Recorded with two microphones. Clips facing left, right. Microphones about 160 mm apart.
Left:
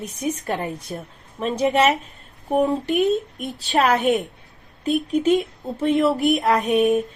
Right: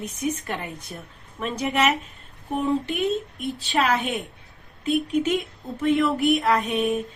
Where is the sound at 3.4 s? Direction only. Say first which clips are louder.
Left 3 dB; 40° left (ahead or behind).